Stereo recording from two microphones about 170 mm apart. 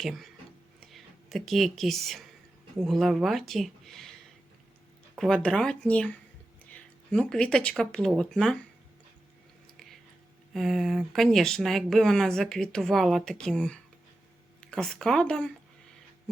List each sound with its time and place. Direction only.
0.0 s speech: centre (ahead or behind)
10.5 s speech: centre (ahead or behind)